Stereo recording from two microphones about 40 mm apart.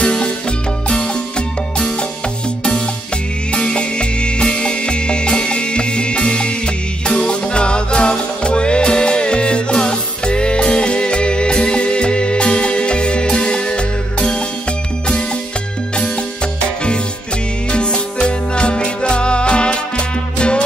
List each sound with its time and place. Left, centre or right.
0.0 s music: left
3.5 s music: left
17.6 s music: left